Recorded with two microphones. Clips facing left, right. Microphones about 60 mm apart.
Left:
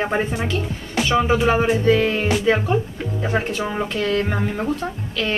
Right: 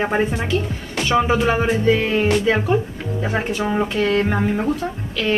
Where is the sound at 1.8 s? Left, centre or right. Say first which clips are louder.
Right 1 dB; centre.